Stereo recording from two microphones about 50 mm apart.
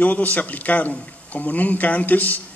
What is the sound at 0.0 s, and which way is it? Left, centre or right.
A man's voice, left.